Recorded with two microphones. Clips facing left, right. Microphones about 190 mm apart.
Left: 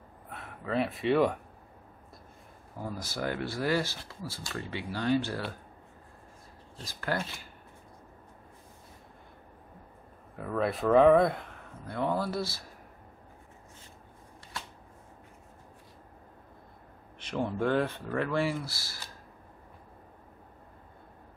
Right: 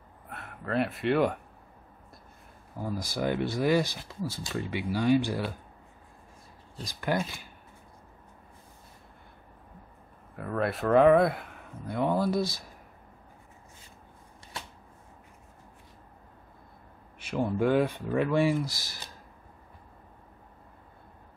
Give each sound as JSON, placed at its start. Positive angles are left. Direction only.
{"t": 0.3, "sound": "speech", "side_deg": 0}
{"t": 2.9, "sound": "speech", "side_deg": -15}
{"t": 6.9, "sound": "speech", "side_deg": -15}
{"t": 10.3, "sound": "speech", "side_deg": 0}
{"t": 11.9, "sound": "speech", "side_deg": -15}
{"t": 17.2, "sound": "speech", "side_deg": -10}